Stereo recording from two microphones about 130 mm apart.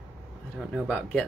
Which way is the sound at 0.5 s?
5° left (ahead or behind).